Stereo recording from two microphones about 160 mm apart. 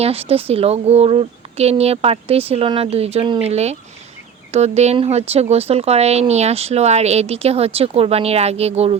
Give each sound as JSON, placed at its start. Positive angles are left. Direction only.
{"t": 0.0, "sound": "speech", "side_deg": -40}